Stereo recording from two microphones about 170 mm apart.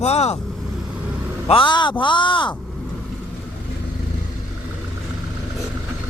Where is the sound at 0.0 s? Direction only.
40° left (ahead or behind).